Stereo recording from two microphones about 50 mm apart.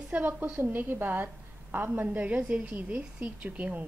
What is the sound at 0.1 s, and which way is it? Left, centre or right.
A woman's voice, right.